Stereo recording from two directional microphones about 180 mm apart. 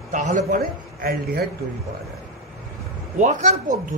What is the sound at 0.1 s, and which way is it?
A man's voice, 45° right (ahead or behind).